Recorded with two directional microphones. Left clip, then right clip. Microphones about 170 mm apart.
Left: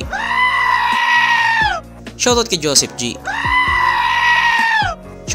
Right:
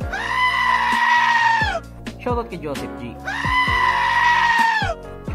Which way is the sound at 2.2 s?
45° left (ahead or behind).